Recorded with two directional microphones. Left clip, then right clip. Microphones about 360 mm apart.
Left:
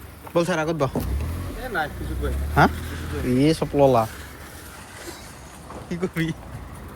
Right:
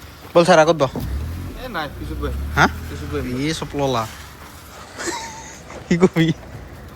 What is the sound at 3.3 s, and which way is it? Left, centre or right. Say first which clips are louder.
Speech: left 7 dB; centre.